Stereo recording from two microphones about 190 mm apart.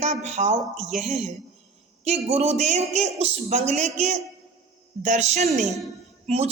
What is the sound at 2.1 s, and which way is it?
A woman's voice, 30° right (ahead or behind).